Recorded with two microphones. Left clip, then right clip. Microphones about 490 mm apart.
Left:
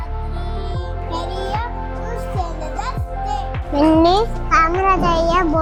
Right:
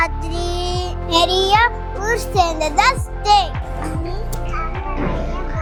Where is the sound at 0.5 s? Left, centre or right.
Right.